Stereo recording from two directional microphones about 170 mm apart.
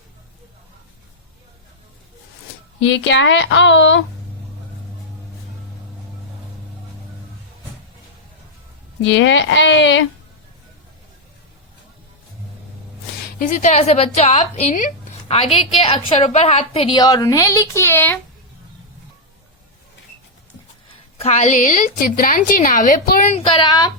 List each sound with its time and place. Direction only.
2.9 s speech: 90° left
9.0 s speech: 90° left
13.4 s a woman's voice: 45° left (ahead or behind); by 18.2 s 10° left (ahead or behind)
21.2 s a woman's voice: 45° left (ahead or behind)
23.3 s a woman's voice: 25° left (ahead or behind)